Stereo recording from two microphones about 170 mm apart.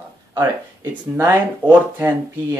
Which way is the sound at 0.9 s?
10° right (ahead or behind).